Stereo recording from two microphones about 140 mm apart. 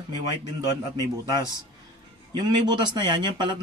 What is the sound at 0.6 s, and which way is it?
A man's voice, 25° right (ahead or behind).